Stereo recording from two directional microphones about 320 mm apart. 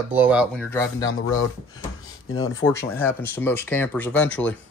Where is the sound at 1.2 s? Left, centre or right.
Left.